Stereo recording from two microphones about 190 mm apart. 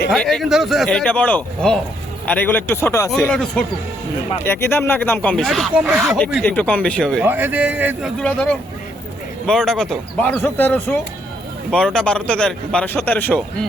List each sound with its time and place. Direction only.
0.1 s speech: 5° left (ahead or behind)
4.4 s speech: 10° left (ahead or behind)
7.3 s a man's voice: 10° right (ahead or behind)
8.2 s speech: 5° left (ahead or behind)